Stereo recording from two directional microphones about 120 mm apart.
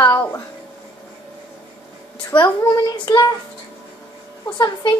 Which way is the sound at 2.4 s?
40° left (ahead or behind).